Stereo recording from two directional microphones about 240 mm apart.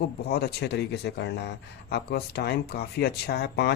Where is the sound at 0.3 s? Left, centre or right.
Left.